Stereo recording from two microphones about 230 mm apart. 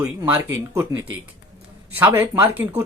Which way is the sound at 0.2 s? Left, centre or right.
Centre.